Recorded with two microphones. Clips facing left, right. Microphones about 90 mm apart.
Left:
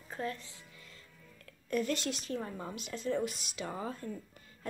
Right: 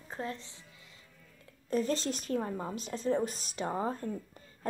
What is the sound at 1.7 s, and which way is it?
A woman's voice, 30° right (ahead or behind).